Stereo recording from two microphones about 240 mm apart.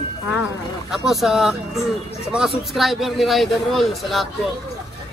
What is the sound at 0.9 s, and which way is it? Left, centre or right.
A man's voice, centre.